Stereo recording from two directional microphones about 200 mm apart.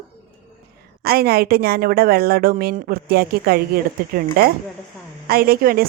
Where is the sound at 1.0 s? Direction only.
50° right (ahead or behind).